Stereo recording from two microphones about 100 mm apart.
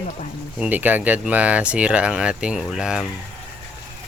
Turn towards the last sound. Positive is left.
turn(degrees=-5)  # may be behind; listen again after turning